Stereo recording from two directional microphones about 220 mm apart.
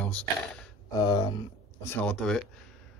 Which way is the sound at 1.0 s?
20° left (ahead or behind).